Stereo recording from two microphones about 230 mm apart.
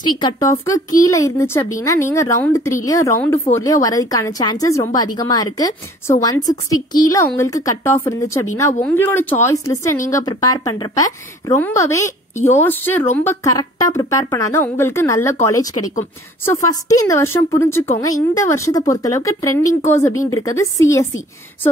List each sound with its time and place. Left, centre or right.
0.2 s speech: centre